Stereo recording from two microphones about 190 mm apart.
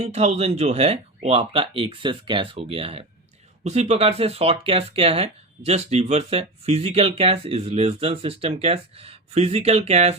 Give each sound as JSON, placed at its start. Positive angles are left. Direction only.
{"t": 0.0, "sound": "speech", "side_deg": -35}